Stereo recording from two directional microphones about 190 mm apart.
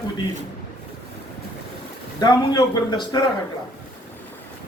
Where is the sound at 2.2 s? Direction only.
20° left (ahead or behind).